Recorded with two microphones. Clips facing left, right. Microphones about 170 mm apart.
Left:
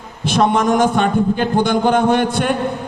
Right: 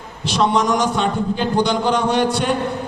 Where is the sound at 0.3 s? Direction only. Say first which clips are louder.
Left 3 dB; 50° left (ahead or behind).